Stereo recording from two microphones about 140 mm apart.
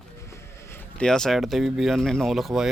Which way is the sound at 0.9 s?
5° left (ahead or behind).